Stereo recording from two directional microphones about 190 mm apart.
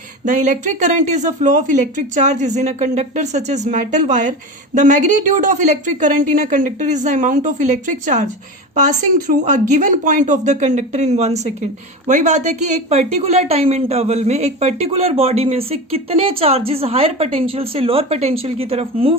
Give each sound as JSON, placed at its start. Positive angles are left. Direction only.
{"t": 0.3, "sound": "speech", "side_deg": -40}